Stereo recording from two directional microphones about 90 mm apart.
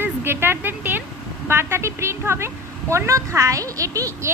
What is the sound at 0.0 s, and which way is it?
Speech, 25° right (ahead or behind).